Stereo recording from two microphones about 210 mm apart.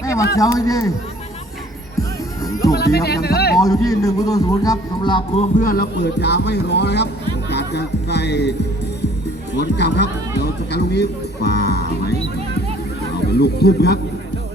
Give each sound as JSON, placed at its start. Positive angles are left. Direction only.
{"t": 0.0, "sound": "a sound", "side_deg": 15}
{"t": 0.3, "sound": "speech", "side_deg": 15}
{"t": 2.0, "sound": "music", "side_deg": 15}
{"t": 2.7, "sound": "music", "side_deg": 50}
{"t": 3.6, "sound": "speech", "side_deg": 15}
{"t": 5.5, "sound": "speech", "side_deg": 45}
{"t": 7.5, "sound": "honk", "side_deg": 55}
{"t": 9.6, "sound": "speech", "side_deg": 55}
{"t": 13.4, "sound": "speech", "side_deg": 50}